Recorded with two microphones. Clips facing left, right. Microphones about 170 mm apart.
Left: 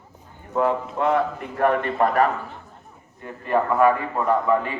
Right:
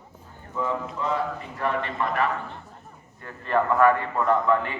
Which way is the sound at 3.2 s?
15° left (ahead or behind).